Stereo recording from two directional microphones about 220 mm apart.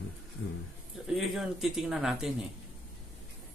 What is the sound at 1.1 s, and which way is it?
Speech, centre (ahead or behind).